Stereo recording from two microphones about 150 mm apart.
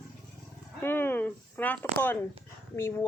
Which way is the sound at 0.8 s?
15° left (ahead or behind).